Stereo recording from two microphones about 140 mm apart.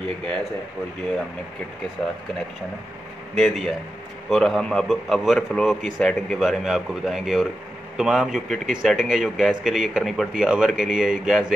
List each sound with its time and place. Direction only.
3.3 s a man's voice: centre (ahead or behind)